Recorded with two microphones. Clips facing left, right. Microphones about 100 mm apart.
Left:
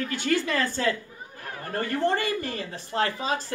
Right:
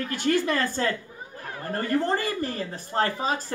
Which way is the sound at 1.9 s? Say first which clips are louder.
Even; 40° right (ahead or behind).